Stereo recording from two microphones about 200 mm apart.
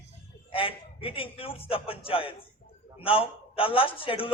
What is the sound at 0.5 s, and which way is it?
A man's voice, 25° left (ahead or behind).